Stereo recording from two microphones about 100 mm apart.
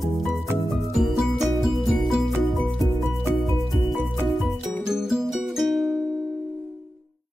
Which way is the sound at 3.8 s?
Centre (ahead or behind).